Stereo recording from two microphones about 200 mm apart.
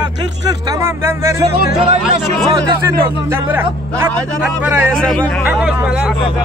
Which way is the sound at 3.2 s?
10° right (ahead or behind).